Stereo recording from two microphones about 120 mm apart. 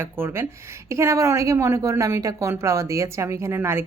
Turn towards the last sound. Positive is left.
turn(degrees=-20)  # may be behind; listen again after turning